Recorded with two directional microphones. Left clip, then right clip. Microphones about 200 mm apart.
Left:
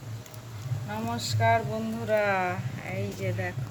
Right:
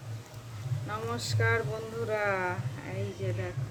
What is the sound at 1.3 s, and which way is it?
Speech, 45° right (ahead or behind).